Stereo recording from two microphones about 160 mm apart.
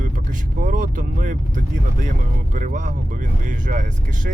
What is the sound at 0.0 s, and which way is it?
Speech, 55° right (ahead or behind).